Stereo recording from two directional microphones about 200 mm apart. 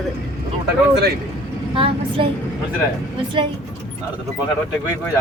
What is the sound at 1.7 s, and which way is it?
Speech, 25° right (ahead or behind).